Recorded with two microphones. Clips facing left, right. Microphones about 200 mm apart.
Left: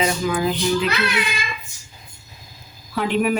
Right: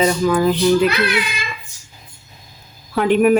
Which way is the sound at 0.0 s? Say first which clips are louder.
Right 5 dB; 40° right (ahead or behind).